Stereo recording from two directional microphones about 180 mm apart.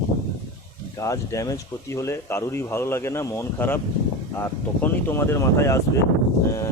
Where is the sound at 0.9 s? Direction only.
15° left (ahead or behind).